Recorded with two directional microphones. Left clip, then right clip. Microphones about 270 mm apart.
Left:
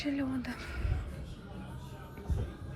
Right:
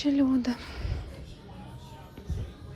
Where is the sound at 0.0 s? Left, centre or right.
Centre.